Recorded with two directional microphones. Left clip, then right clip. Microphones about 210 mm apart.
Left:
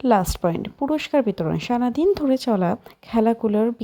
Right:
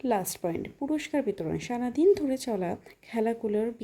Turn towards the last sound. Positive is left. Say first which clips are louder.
# left 8 dB
turn(degrees=20)  # may be behind; listen again after turning